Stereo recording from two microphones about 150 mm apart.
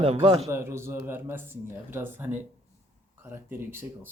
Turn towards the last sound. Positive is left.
turn(degrees=-15)  # may be behind; listen again after turning